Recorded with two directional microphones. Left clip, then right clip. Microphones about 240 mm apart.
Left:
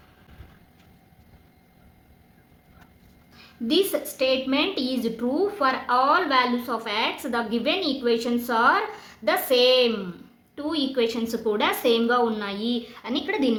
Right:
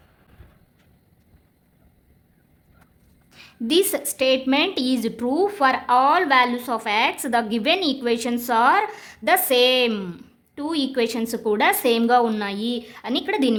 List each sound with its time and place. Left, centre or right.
3.3 s a woman's voice: right